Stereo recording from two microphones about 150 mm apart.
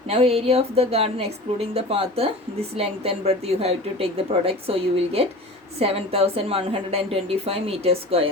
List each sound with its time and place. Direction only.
0.1 s a woman's voice: 40° right (ahead or behind)